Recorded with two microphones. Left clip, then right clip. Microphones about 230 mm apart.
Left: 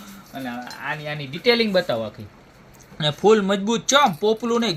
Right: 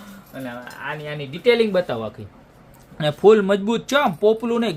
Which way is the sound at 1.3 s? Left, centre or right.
Centre.